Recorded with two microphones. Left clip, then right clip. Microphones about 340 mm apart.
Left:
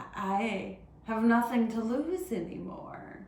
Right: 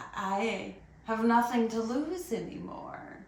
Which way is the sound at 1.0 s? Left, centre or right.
Centre.